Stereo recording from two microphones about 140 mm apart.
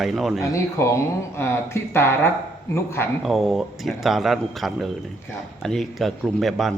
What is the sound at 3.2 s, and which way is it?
A man's voice, centre (ahead or behind).